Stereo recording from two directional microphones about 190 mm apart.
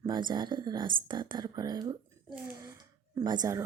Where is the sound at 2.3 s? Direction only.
15° right (ahead or behind).